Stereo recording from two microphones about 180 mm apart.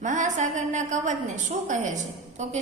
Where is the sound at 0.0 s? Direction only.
45° right (ahead or behind).